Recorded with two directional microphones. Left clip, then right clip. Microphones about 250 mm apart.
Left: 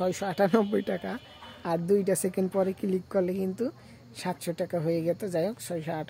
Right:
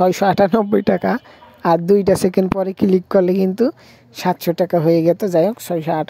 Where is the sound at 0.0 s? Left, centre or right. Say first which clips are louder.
Right 13 dB; right.